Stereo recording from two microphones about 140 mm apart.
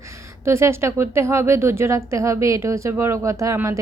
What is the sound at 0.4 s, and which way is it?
Speech, 20° right (ahead or behind).